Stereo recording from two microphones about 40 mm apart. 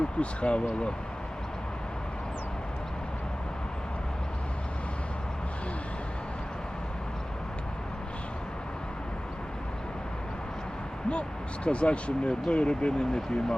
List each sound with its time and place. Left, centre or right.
0.2 s speech: left
11.1 s speech: left